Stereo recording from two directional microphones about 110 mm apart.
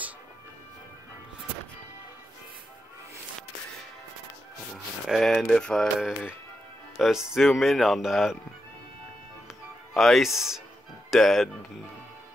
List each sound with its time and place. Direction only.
5.0 s speech: centre (ahead or behind)
7.0 s speech: 5° right (ahead or behind)
9.9 s speech: centre (ahead or behind)